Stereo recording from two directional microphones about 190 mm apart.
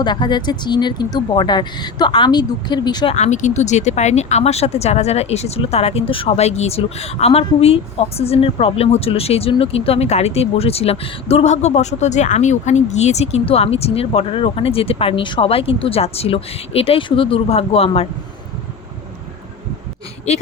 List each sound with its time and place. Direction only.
0.0 s speech: 25° left (ahead or behind)
3.2 s speech: 40° left (ahead or behind)